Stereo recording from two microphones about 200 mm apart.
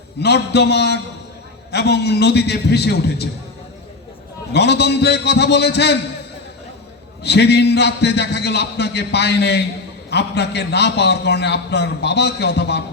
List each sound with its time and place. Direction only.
0.2 s a man's voice: 55° left (ahead or behind)
4.5 s a man's voice: 55° left (ahead or behind)
7.2 s a man's voice: 55° left (ahead or behind)